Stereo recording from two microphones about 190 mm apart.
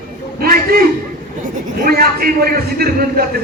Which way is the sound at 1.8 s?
50° right (ahead or behind).